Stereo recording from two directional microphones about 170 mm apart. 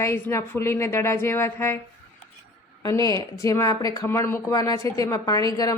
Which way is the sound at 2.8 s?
20° left (ahead or behind).